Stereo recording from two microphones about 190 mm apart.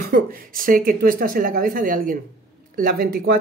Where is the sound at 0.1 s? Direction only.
45° right (ahead or behind).